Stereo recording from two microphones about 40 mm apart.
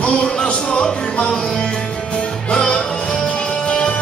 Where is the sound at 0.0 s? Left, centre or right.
Left.